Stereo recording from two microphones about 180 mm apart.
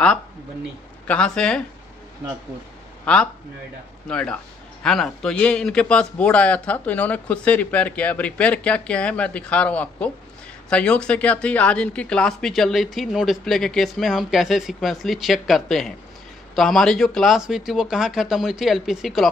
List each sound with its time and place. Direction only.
1.0 s speech: 5° left (ahead or behind)
3.1 s a man's voice: 5° left (ahead or behind)